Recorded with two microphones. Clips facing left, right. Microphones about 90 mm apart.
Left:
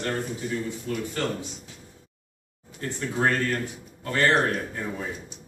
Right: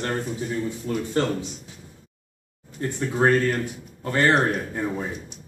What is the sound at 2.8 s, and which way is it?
A man's voice, 25° right (ahead or behind).